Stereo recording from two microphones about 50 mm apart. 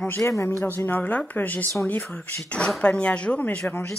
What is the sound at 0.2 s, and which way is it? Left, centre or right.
Speech, left.